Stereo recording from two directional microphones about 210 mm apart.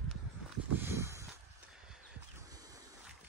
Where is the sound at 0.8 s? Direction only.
10° right (ahead or behind).